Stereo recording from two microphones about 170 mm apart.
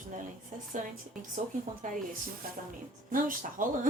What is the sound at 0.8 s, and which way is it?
Speech, 50° right (ahead or behind).